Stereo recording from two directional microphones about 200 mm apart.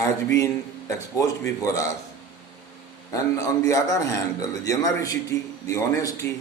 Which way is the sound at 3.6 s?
15° left (ahead or behind).